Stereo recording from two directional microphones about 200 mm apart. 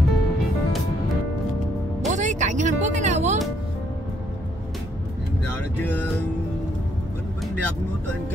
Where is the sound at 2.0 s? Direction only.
35° right (ahead or behind).